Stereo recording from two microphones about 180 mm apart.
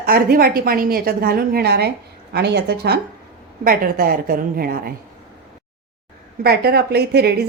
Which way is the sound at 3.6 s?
55° right (ahead or behind).